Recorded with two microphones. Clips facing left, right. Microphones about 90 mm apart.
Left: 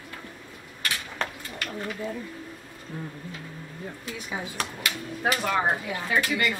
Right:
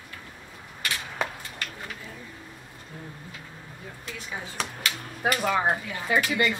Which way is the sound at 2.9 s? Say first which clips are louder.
Left 6 dB; 40° left (ahead or behind).